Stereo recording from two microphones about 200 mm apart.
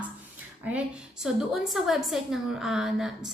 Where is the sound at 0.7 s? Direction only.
5° right (ahead or behind).